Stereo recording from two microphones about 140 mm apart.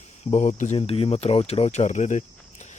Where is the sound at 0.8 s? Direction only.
40° left (ahead or behind); by 2.2 s 60° left (ahead or behind).